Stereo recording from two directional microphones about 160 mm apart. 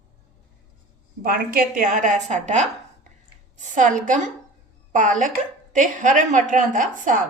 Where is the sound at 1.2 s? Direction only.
65° right (ahead or behind).